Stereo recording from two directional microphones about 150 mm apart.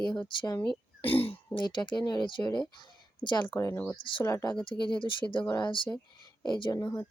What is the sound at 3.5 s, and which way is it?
Speech, 15° left (ahead or behind).